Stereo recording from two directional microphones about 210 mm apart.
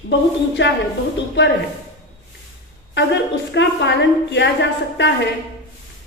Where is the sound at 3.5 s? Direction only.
55° left (ahead or behind).